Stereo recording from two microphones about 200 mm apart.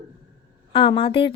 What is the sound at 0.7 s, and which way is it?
Speech, 25° left (ahead or behind).